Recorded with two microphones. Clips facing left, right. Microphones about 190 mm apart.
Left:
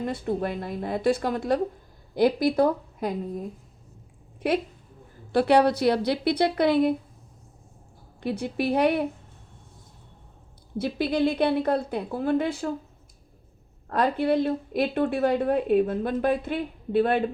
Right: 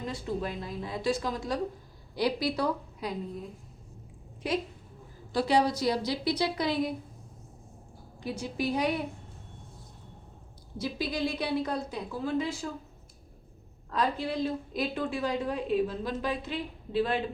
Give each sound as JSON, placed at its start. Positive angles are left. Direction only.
{"t": 0.0, "sound": "a woman's voice", "side_deg": 55}
{"t": 4.4, "sound": "a woman's voice", "side_deg": 60}
{"t": 8.2, "sound": "a woman's voice", "side_deg": 60}
{"t": 10.8, "sound": "a woman's voice", "side_deg": 60}
{"t": 13.9, "sound": "a woman's voice", "side_deg": 60}